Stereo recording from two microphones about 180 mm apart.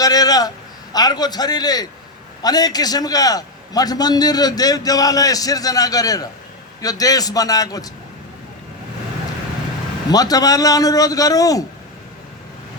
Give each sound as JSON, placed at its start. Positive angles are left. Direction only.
{"t": 0.0, "sound": "a man's voice", "side_deg": 20}
{"t": 10.1, "sound": "a man's voice", "side_deg": 20}